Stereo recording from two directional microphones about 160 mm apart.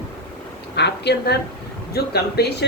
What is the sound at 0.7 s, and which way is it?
Speech, 90° left.